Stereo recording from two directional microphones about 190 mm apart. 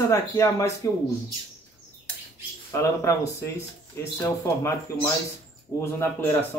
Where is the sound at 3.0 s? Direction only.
15° left (ahead or behind).